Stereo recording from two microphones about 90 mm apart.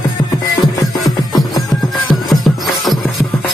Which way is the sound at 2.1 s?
Centre (ahead or behind).